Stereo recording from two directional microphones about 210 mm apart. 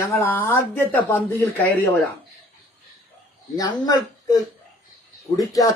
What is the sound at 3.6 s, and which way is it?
Speech, 15° left (ahead or behind).